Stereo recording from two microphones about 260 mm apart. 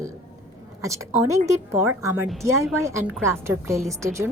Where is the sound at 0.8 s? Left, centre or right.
Centre.